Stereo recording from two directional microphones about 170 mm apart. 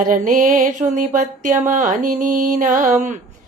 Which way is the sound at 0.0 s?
50° right (ahead or behind).